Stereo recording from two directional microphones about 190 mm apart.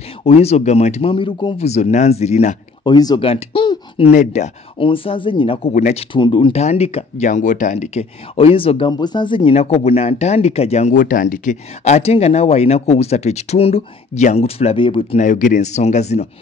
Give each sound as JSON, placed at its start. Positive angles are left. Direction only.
{"t": 0.2, "sound": "speech", "side_deg": 30}
{"t": 2.8, "sound": "speech", "side_deg": 20}
{"t": 6.1, "sound": "speech", "side_deg": 25}
{"t": 15.2, "sound": "speech", "side_deg": 40}